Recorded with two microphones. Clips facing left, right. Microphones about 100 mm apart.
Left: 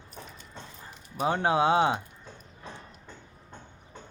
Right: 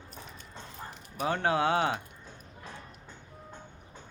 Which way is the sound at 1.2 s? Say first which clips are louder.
Left 3 dB; 20° left (ahead or behind).